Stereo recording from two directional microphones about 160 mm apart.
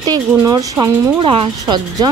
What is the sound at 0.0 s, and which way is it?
Speech, 25° right (ahead or behind).